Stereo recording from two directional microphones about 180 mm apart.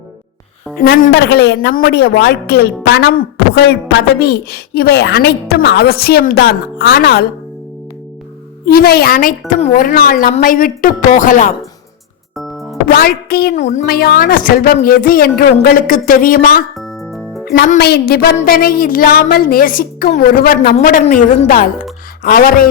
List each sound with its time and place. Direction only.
0.8 s a woman's voice: 55° left (ahead or behind)
8.6 s a woman's voice: 55° left (ahead or behind)
9.5 s speech: 45° left (ahead or behind)
12.9 s a woman's voice: 55° left (ahead or behind)
16.7 s music: centre (ahead or behind)
17.4 s music: 65° left (ahead or behind)
17.7 s a woman's voice: 65° left (ahead or behind)